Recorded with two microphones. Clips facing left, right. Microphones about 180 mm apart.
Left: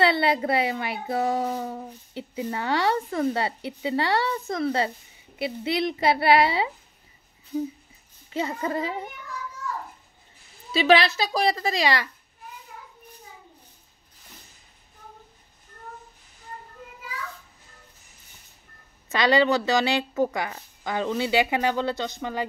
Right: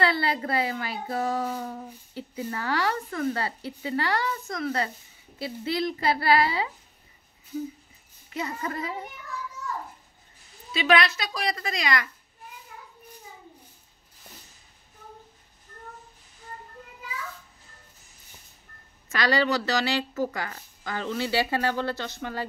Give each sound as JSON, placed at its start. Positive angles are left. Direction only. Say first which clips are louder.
{"t": 0.0, "sound": "speech", "louder": "left 4 dB", "side_deg": 25}
{"t": 8.3, "sound": "speech", "louder": "left 5 dB", "side_deg": 25}
{"t": 10.7, "sound": "speech", "louder": "left 4 dB", "side_deg": 30}
{"t": 19.1, "sound": "a woman's voice", "louder": "left 4 dB", "side_deg": 20}